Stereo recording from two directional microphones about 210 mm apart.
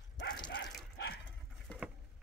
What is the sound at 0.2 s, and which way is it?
Dog, 55° left (ahead or behind).